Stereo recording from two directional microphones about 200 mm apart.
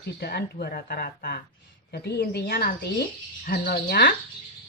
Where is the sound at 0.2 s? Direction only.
50° left (ahead or behind).